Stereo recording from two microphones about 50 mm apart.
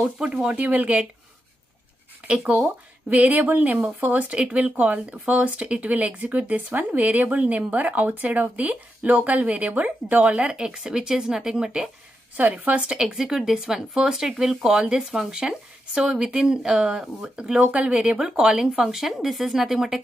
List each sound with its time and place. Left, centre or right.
0.0 s speech: centre
0.6 s speech: right
2.2 s speech: right
12.4 s speech: right
13.0 s speech: centre
17.6 s speech: right; by 20.0 s centre